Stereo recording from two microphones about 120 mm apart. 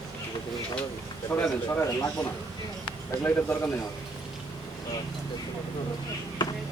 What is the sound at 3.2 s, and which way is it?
Speech, 20° left (ahead or behind).